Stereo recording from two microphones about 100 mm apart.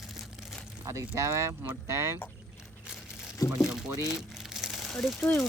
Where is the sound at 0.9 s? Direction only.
30° right (ahead or behind).